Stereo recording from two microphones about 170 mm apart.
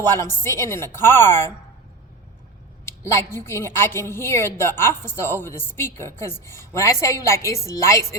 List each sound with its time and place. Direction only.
0.2 s a woman's voice: 15° left (ahead or behind)
2.8 s a woman's voice: 15° left (ahead or behind)